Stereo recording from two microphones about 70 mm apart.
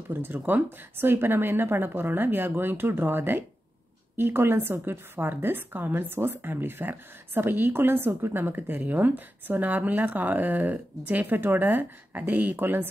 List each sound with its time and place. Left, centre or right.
0.1 s a woman's voice: right